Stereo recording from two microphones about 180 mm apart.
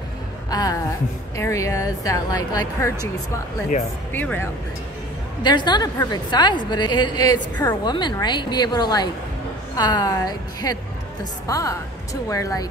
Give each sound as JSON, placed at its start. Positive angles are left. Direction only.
{"t": 0.5, "sound": "a woman's voice", "side_deg": 20}
{"t": 4.1, "sound": "a woman's voice", "side_deg": 10}
{"t": 5.4, "sound": "a woman's voice", "side_deg": 25}